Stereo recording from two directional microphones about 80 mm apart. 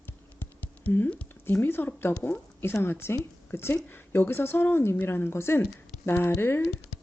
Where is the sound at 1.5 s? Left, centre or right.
Left.